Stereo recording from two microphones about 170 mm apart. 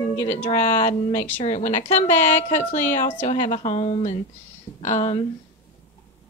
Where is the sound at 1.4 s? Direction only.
40° left (ahead or behind).